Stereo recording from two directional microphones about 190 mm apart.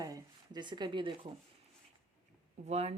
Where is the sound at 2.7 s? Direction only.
35° right (ahead or behind).